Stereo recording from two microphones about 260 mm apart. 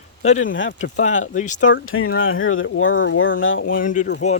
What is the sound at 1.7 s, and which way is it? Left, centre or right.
Speech, left.